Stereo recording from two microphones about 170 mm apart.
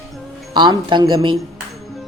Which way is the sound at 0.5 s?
25° right (ahead or behind).